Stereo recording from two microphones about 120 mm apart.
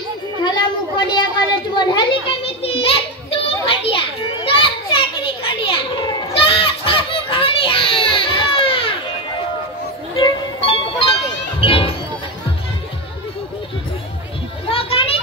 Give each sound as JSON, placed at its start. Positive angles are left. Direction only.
{"t": 0.4, "sound": "a sound", "side_deg": 35}
{"t": 1.8, "sound": "children playing", "side_deg": 45}
{"t": 10.2, "sound": "music", "side_deg": 45}
{"t": 14.7, "sound": "children playing", "side_deg": 50}